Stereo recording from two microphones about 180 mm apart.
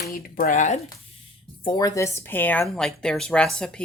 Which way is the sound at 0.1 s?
50° left (ahead or behind).